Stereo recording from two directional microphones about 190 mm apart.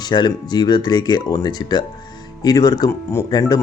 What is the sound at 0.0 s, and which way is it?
Speech, 20° left (ahead or behind).